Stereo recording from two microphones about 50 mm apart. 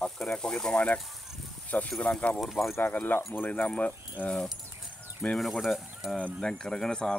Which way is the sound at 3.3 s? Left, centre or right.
Left.